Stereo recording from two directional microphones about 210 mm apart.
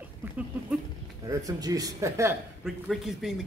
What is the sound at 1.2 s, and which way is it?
A man's voice, 15° right (ahead or behind).